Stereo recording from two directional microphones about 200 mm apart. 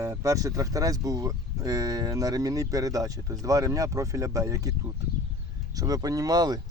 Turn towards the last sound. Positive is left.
turn(degrees=-20)  # may be behind; listen again after turning